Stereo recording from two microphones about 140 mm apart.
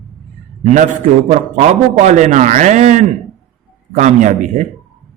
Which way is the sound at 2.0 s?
55° right (ahead or behind).